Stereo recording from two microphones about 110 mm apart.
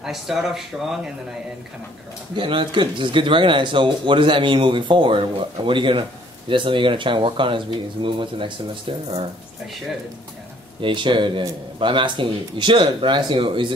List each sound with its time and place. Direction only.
0.0 s speech: 5° right (ahead or behind)
2.3 s speech: 50° right (ahead or behind)
10.8 s speech: 50° right (ahead or behind)